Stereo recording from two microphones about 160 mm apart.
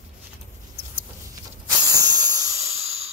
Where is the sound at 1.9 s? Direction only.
25° right (ahead or behind).